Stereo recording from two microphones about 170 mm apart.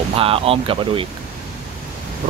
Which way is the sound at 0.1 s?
35° right (ahead or behind).